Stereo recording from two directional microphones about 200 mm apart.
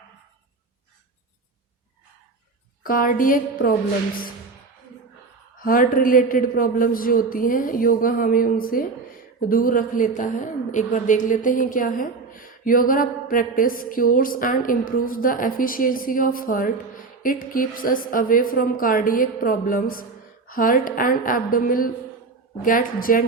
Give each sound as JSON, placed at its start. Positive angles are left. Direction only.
{"t": 2.8, "sound": "a woman's voice", "side_deg": 45}
{"t": 5.6, "sound": "a woman's voice", "side_deg": 45}